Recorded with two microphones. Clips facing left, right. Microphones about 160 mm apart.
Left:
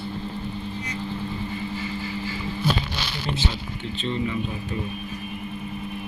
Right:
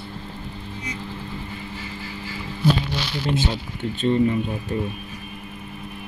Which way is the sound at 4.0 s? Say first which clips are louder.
Right 8 dB; 50° right (ahead or behind).